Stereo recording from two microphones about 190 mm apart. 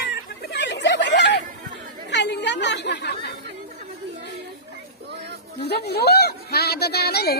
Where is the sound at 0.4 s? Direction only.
65° left (ahead or behind).